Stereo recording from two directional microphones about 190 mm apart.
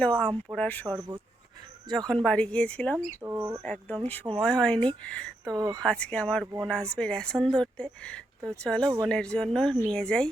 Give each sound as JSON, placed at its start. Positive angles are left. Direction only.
{"t": 0.0, "sound": "speech", "side_deg": 5}
{"t": 2.2, "sound": "speech", "side_deg": 5}
{"t": 3.2, "sound": "speech", "side_deg": -10}
{"t": 3.6, "sound": "speech", "side_deg": 5}
{"t": 5.5, "sound": "speech", "side_deg": -20}
{"t": 5.8, "sound": "speech", "side_deg": 5}